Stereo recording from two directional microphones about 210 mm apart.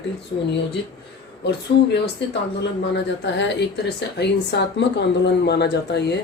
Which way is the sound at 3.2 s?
55° left (ahead or behind).